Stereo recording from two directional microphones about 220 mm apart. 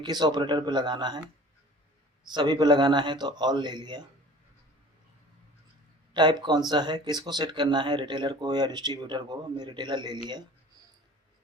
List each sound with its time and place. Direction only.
0.0 s speech: 20° right (ahead or behind)
2.3 s speech: 20° right (ahead or behind)
6.1 s speech: 20° right (ahead or behind)